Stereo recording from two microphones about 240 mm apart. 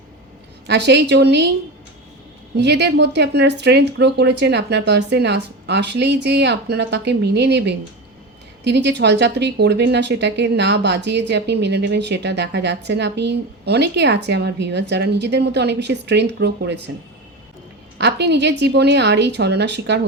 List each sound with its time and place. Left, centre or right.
0.7 s speech: right
2.6 s speech: right
17.9 s speech: right